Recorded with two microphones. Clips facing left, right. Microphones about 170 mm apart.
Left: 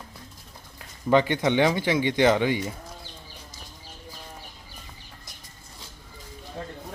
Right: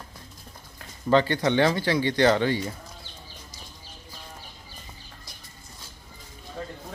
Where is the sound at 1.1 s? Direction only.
15° left (ahead or behind).